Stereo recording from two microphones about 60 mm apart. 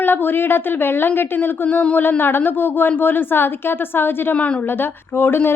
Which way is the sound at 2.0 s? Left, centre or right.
Left.